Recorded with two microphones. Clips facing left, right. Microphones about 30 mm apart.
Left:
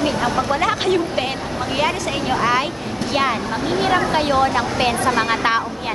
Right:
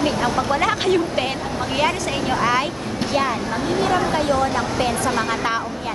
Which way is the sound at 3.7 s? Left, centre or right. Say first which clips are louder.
Left 2 dB; left.